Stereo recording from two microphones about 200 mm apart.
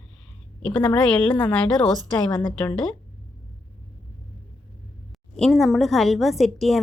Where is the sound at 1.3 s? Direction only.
10° left (ahead or behind).